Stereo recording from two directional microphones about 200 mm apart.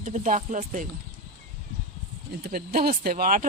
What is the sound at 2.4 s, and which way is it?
Speech, 45° right (ahead or behind).